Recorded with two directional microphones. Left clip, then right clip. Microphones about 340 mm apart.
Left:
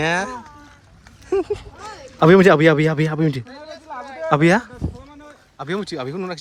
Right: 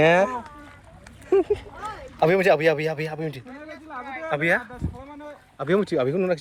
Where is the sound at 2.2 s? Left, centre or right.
Left.